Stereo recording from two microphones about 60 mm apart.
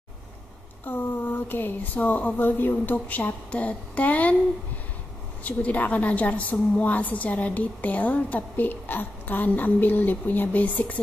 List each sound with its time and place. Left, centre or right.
0.8 s a woman's voice: left
5.4 s a woman's voice: left